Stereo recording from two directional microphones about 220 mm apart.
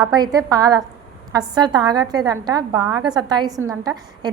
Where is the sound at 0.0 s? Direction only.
15° right (ahead or behind).